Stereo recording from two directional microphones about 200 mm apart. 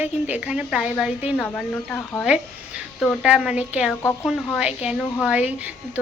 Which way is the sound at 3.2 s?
5° right (ahead or behind).